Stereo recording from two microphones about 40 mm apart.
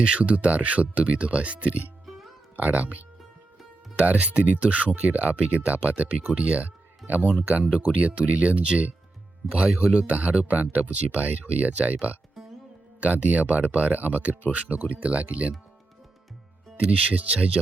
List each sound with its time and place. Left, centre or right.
0.0 s speech: right
2.0 s music: centre
2.6 s speech: right
4.0 s speech: right
9.5 s speech: right
10.2 s speech: right
13.0 s speech: right
16.8 s speech: right